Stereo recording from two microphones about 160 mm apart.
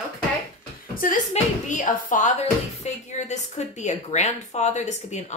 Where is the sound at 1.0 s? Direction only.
55° left (ahead or behind).